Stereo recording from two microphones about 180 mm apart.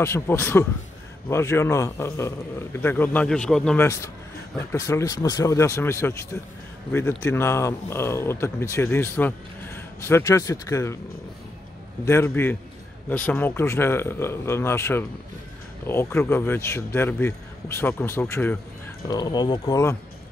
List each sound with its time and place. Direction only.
0.0 s speech: 15° left (ahead or behind)
3.8 s speech: 15° left (ahead or behind)
12.0 s speech: 15° left (ahead or behind)
19.0 s speech: 20° left (ahead or behind)